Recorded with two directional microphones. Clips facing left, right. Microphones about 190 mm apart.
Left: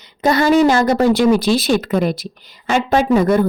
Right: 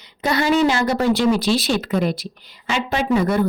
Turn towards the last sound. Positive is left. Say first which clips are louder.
# left 5 dB
turn(degrees=45)  # may be behind; listen again after turning